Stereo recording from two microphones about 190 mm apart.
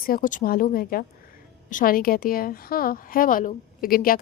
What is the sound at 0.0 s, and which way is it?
A woman's voice, 45° left (ahead or behind).